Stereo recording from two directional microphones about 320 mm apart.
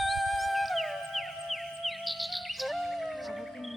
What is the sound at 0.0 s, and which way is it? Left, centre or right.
Music, centre.